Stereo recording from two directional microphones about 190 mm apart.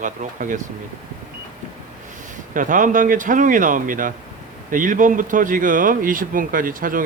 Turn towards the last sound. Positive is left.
turn(degrees=-45)  # may be behind; listen again after turning